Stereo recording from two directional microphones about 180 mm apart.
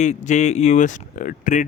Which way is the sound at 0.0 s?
40° left (ahead or behind).